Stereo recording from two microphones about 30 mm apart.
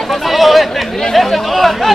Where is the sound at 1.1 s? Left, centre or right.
Centre.